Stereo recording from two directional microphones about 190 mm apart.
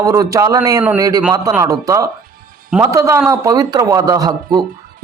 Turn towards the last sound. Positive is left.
turn(degrees=-20)  # may be behind; listen again after turning